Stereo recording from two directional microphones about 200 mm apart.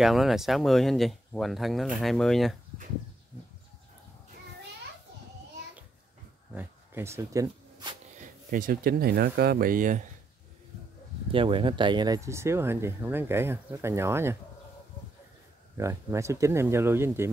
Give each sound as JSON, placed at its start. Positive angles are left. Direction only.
{"t": 0.0, "sound": "speech", "side_deg": 0}
{"t": 6.5, "sound": "a sound", "side_deg": -10}
{"t": 8.2, "sound": "speech", "side_deg": -40}
{"t": 11.3, "sound": "speech", "side_deg": -25}
{"t": 15.8, "sound": "speech", "side_deg": -15}